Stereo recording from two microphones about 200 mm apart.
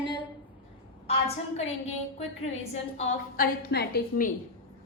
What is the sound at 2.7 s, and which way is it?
A woman's voice, 40° left (ahead or behind).